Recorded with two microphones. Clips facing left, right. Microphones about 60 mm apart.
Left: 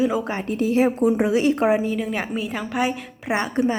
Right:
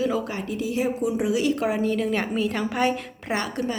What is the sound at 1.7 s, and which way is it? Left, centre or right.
A woman's voice, centre.